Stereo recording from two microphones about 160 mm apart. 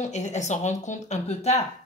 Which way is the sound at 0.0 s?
45° left (ahead or behind).